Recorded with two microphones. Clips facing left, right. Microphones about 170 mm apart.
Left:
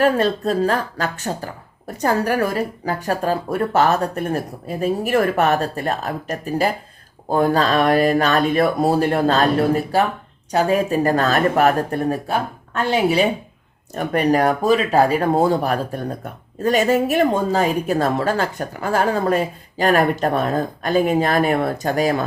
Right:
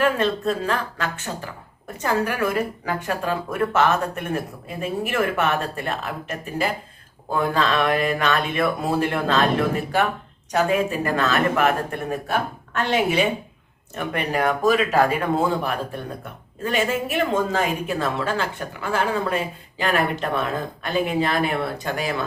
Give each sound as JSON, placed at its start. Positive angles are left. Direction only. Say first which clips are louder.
{"t": 0.0, "sound": "speech", "louder": "left 3 dB", "side_deg": 40}